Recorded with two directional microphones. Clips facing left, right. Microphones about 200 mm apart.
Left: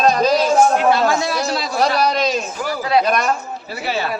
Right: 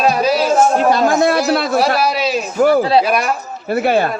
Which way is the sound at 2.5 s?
55° right (ahead or behind).